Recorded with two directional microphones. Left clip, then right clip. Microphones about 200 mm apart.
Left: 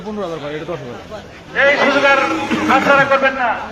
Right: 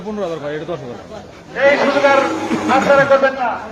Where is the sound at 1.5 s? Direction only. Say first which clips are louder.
Left 1 dB; 15° right (ahead or behind).